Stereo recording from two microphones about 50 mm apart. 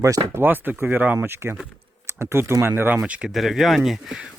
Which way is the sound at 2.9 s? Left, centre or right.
Right.